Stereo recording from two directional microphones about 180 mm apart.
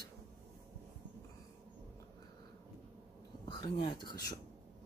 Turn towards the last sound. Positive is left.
turn(degrees=25)  # may be behind; listen again after turning